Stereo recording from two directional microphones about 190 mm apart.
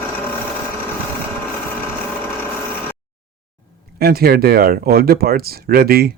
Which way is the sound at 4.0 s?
55° right (ahead or behind).